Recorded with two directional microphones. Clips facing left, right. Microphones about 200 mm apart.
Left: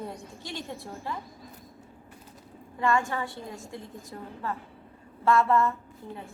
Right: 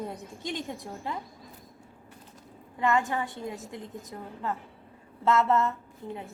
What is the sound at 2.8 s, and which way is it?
A woman's voice, 20° right (ahead or behind).